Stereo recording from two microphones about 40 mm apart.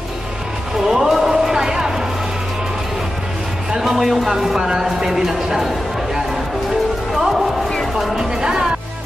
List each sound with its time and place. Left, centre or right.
0.7 s a sound: centre
3.8 s a man's voice: centre
7.2 s music: centre
8.0 s a man's voice: centre